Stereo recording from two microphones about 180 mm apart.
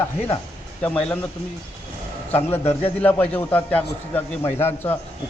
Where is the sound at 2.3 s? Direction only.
10° left (ahead or behind).